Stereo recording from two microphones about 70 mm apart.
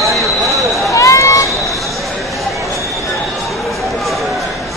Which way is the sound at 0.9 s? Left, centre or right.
Left.